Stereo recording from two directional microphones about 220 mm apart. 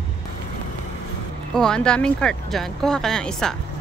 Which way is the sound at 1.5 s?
5° left (ahead or behind).